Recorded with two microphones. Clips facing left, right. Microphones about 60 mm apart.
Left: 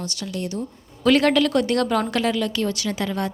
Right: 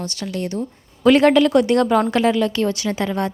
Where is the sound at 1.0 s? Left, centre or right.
Right.